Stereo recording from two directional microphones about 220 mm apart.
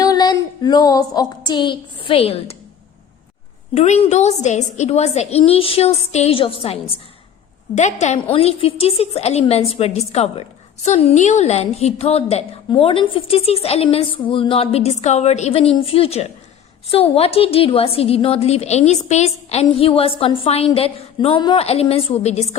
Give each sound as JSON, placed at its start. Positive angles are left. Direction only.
{"t": 0.0, "sound": "child singing", "side_deg": 20}
{"t": 3.8, "sound": "a woman's voice", "side_deg": 30}